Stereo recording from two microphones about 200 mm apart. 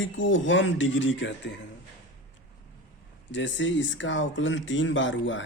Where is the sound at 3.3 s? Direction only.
65° left (ahead or behind).